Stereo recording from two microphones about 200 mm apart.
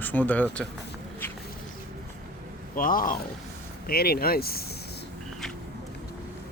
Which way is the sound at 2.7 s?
45° left (ahead or behind).